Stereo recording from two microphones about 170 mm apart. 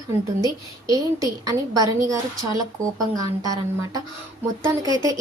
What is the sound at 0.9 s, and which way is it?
A woman's voice, 20° right (ahead or behind).